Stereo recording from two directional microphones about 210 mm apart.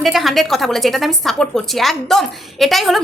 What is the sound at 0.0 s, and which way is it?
A woman's voice, centre (ahead or behind).